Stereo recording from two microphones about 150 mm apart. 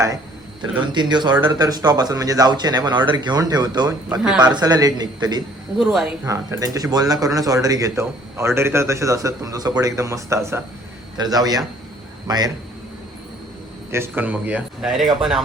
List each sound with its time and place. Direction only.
0.7 s a man's voice: 30° right (ahead or behind)
5.8 s speech: centre (ahead or behind)
6.2 s a man's voice: 20° right (ahead or behind)
13.9 s speech: 15° right (ahead or behind)